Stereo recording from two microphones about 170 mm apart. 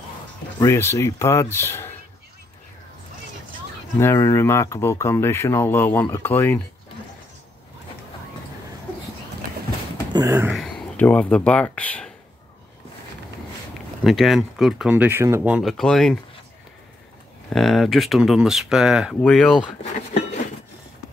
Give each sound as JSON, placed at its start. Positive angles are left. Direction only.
{"t": 0.7, "sound": "speech", "side_deg": 15}
{"t": 4.0, "sound": "speech", "side_deg": 15}
{"t": 10.1, "sound": "a sound", "side_deg": -20}
{"t": 10.5, "sound": "speech", "side_deg": 5}
{"t": 14.0, "sound": "speech", "side_deg": 0}
{"t": 15.8, "sound": "speech", "side_deg": 0}
{"t": 17.5, "sound": "speech", "side_deg": 0}